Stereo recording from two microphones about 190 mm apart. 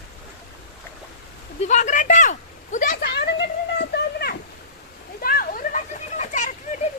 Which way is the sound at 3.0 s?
60° left (ahead or behind).